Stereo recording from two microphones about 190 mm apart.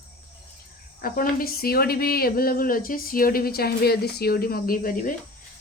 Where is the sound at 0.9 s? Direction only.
50° left (ahead or behind).